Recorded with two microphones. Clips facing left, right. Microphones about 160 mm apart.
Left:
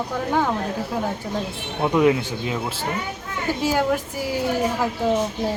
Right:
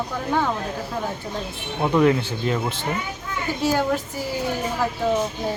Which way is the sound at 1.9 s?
10° left (ahead or behind).